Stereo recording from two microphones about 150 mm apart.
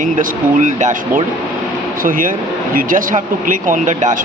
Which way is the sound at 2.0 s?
65° right (ahead or behind).